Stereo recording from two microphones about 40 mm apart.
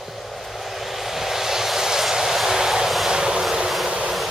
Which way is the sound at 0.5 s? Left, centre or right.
Centre.